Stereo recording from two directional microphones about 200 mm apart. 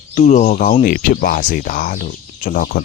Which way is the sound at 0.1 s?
35° left (ahead or behind).